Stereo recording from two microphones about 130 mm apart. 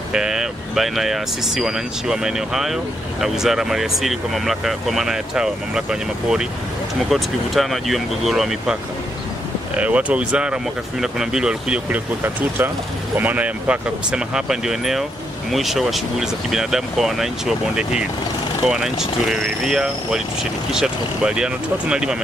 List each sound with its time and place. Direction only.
0.1 s speech: 5° right (ahead or behind)
9.8 s speech: 10° right (ahead or behind)